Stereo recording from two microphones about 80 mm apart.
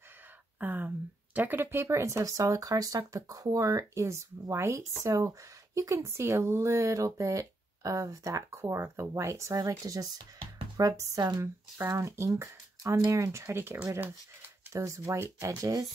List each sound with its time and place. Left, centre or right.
0.6 s speech: right